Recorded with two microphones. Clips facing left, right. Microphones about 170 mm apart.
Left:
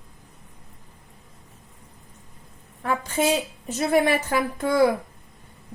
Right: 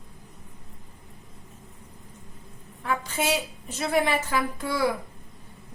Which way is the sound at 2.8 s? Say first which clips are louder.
Left 4 dB; 50° left (ahead or behind).